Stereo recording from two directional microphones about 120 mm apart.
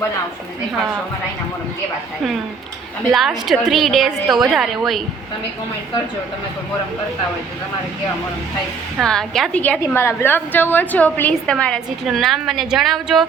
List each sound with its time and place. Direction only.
3.1 s a woman's voice: centre (ahead or behind)
9.0 s a woman's voice: 5° left (ahead or behind)
9.8 s a woman's voice: 20° left (ahead or behind); by 13.2 s centre (ahead or behind)